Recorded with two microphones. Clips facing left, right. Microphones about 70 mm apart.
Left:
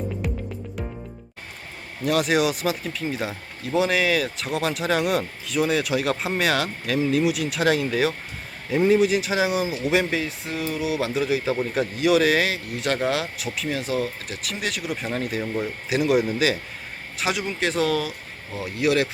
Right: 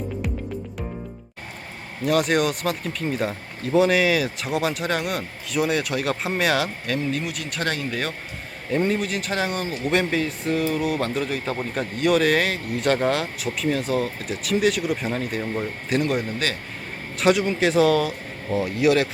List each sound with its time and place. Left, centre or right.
2.0 s speech: centre